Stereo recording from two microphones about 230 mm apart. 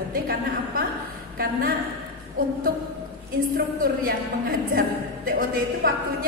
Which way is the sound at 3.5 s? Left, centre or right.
Right.